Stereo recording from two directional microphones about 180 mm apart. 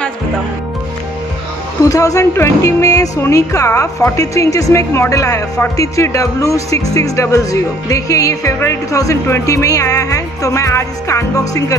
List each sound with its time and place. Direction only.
1.9 s speech: 20° left (ahead or behind)